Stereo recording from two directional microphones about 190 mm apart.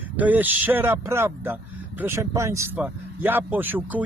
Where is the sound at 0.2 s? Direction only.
10° right (ahead or behind).